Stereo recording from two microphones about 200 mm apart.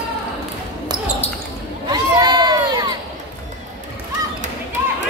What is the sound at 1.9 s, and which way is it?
Crowd, 20° right (ahead or behind).